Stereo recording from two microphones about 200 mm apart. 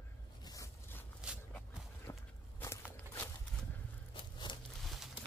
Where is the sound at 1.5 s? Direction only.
5° left (ahead or behind).